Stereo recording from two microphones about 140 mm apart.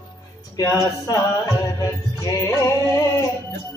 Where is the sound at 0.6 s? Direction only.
25° left (ahead or behind).